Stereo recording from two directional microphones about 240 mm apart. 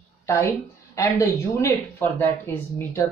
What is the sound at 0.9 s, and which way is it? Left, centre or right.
A woman's voice, centre.